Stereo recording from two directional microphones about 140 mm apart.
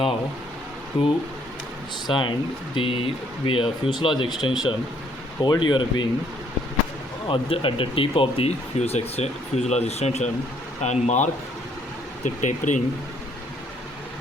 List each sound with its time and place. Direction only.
0.9 s speech: 40° left (ahead or behind)
7.3 s speech: 40° left (ahead or behind); by 12.8 s 60° left (ahead or behind)